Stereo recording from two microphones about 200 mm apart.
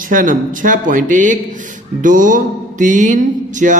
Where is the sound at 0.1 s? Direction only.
40° right (ahead or behind).